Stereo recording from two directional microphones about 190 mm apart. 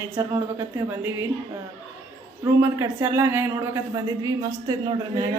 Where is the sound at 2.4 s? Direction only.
15° right (ahead or behind).